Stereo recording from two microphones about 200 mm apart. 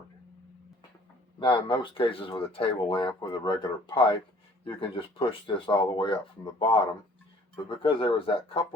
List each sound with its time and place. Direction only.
1.4 s speech: 25° left (ahead or behind)